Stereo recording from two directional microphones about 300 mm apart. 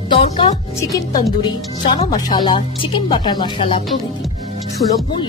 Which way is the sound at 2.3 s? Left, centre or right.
Centre.